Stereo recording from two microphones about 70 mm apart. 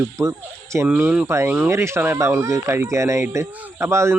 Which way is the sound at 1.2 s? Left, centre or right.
Right.